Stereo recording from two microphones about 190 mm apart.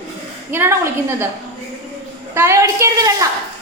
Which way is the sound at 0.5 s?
10° right (ahead or behind).